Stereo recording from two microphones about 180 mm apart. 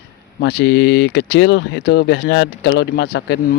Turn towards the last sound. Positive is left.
turn(degrees=65)  # may be behind; listen again after turning